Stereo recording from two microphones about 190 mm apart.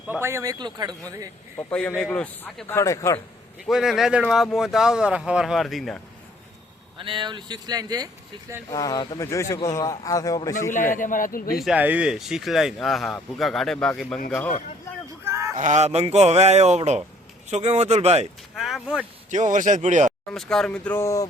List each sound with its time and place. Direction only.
0.1 s speech: 15° right (ahead or behind)
1.5 s a man's voice: 10° left (ahead or behind)
3.7 s speech: centre (ahead or behind)
7.0 s speech: 25° right (ahead or behind)
8.7 s a man's voice: 20° left (ahead or behind)
10.7 s a man's voice: 45° left (ahead or behind)
11.6 s a man's voice: 5° right (ahead or behind)
15.2 s a sound: 15° right (ahead or behind)
15.5 s speech: 40° right (ahead or behind)
18.5 s speech: centre (ahead or behind)
19.3 s speech: 40° right (ahead or behind)
20.3 s a man's voice: centre (ahead or behind)